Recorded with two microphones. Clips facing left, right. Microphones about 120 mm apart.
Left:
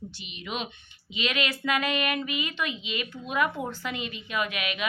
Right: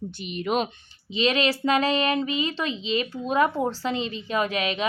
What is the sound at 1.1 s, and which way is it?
Speech, 30° right (ahead or behind).